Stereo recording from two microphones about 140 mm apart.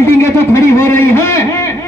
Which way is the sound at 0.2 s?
20° left (ahead or behind).